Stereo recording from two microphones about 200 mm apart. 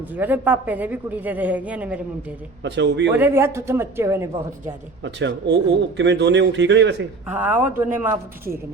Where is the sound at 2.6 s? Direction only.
60° right (ahead or behind).